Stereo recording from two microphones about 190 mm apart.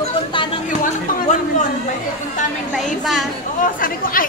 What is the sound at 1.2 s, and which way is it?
Speech, 40° left (ahead or behind).